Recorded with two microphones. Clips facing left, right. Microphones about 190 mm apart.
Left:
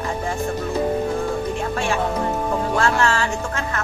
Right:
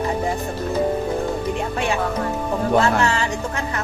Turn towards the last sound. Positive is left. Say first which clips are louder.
# right 2 dB
turn(degrees=-20)  # may be behind; listen again after turning